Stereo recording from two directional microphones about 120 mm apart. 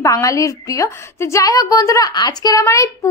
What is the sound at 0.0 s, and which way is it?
A woman's voice, 25° left (ahead or behind).